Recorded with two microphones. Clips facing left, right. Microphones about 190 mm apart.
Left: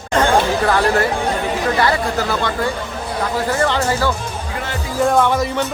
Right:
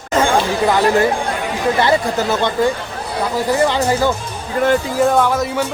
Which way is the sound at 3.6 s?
15° right (ahead or behind).